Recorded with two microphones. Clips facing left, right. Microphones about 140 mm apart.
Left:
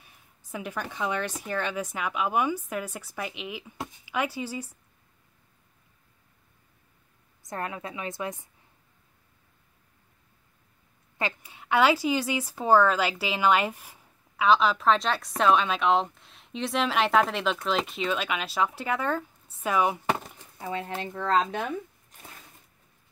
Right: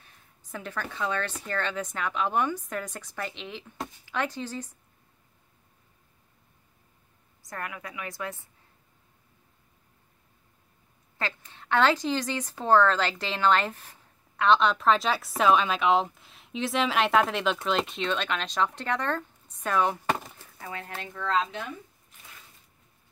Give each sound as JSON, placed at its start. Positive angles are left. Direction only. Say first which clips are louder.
{"t": 0.0, "sound": "speech", "louder": "even", "side_deg": 10}
{"t": 7.4, "sound": "a woman's voice", "louder": "left 4 dB", "side_deg": 25}
{"t": 11.1, "sound": "speech", "louder": "left 2 dB", "side_deg": 15}
{"t": 20.3, "sound": "a sound", "louder": "left 6 dB", "side_deg": 20}
{"t": 21.0, "sound": "speech", "louder": "left 2 dB", "side_deg": 35}